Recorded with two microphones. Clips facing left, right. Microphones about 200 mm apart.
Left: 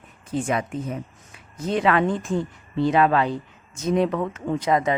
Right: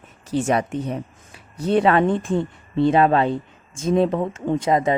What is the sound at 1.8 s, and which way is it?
Speech, 30° right (ahead or behind).